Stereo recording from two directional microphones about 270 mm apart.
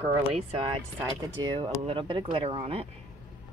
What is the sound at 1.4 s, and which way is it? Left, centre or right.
Speech, centre.